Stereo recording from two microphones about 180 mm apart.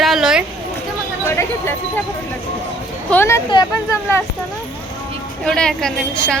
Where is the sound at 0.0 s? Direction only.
Centre (ahead or behind).